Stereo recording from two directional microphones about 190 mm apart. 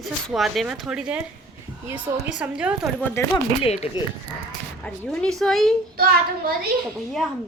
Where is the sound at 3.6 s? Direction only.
30° left (ahead or behind).